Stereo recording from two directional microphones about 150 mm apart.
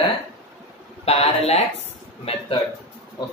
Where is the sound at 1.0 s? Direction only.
45° left (ahead or behind).